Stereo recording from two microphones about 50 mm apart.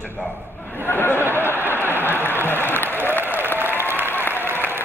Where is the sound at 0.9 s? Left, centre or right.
Left.